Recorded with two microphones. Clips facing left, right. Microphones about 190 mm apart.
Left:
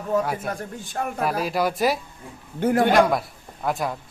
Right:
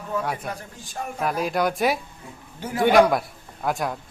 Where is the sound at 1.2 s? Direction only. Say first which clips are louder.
Right 1 dB; centre (ahead or behind).